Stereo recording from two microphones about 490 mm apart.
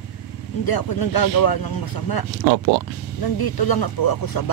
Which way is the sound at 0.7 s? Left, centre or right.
Left.